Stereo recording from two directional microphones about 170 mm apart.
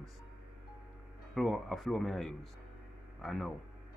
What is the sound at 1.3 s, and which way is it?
Speech, centre (ahead or behind).